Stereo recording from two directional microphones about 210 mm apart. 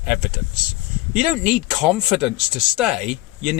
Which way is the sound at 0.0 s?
5° right (ahead or behind).